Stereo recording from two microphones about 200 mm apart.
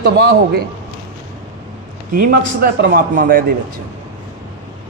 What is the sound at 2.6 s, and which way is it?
Speech, 50° right (ahead or behind).